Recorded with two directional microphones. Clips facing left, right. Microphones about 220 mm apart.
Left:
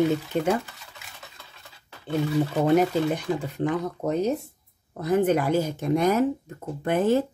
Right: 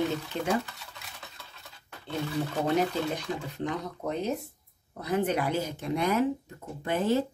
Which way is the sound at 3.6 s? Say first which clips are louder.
Left 7 dB; 45° left (ahead or behind).